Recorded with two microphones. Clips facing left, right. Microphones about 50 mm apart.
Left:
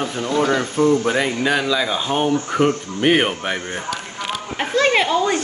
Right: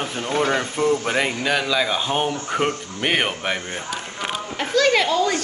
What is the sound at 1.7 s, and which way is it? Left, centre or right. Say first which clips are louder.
Speech: left 1 dB; centre.